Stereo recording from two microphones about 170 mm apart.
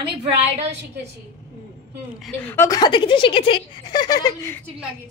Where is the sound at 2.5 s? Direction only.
20° left (ahead or behind).